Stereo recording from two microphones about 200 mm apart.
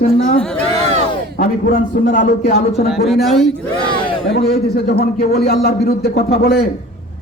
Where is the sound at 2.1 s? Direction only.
45° left (ahead or behind).